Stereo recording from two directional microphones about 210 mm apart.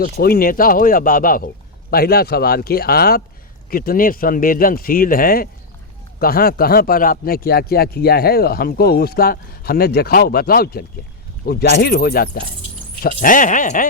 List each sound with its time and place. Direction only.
0.0 s speech: 45° left (ahead or behind)